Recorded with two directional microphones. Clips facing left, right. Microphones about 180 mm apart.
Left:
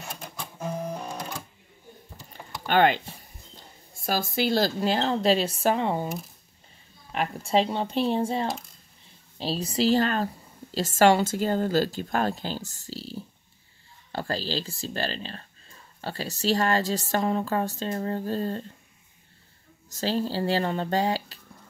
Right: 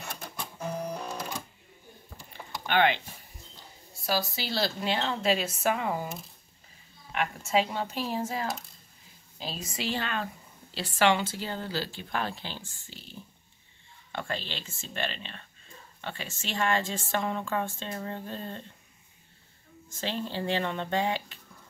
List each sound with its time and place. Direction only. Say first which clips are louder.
0.9 s sewing machine: left 1 dB; 10° left (ahead or behind)
2.6 s speech: left 4 dB; 45° left (ahead or behind)
4.0 s speech: left 5 dB; 50° left (ahead or behind); by 6.0 s 30° left (ahead or behind)
7.1 s speech: left 3 dB; 35° left (ahead or behind)
19.9 s speech: left 6 dB; 40° left (ahead or behind)